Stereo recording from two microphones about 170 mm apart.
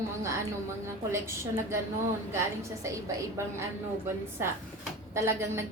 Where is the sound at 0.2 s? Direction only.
15° right (ahead or behind).